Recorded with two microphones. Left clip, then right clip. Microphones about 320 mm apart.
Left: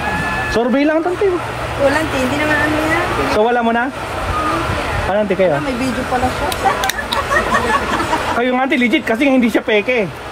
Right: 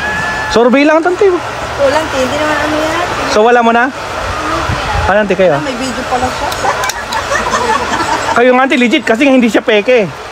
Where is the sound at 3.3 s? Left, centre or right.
Right.